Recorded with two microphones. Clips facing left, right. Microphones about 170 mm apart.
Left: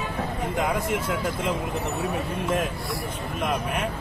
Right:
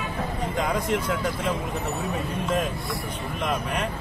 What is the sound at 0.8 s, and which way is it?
Speech, 10° left (ahead or behind).